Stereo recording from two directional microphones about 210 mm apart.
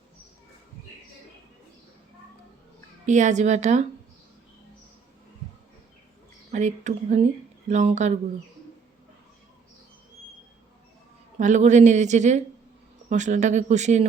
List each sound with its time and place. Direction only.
3.1 s speech: 35° right (ahead or behind)
6.5 s speech: 35° right (ahead or behind)
11.3 s speech: 35° right (ahead or behind)